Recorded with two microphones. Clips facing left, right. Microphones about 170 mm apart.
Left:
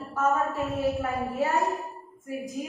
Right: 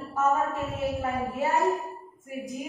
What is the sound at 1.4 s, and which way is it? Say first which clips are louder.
Music: right 2 dB; 20° right (ahead or behind).